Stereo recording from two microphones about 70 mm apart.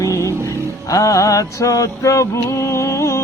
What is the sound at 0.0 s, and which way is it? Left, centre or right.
Music, left.